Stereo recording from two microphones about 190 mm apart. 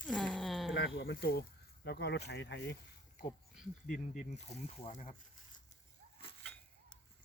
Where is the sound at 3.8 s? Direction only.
45° left (ahead or behind).